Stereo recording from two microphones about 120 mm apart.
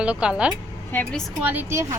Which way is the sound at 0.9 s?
15° left (ahead or behind).